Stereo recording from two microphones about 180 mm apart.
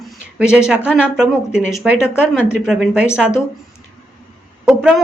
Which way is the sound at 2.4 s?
5° right (ahead or behind).